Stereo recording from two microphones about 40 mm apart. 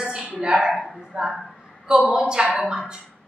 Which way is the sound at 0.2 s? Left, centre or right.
Right.